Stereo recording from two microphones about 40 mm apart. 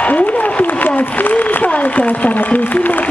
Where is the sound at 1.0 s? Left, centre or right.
Left.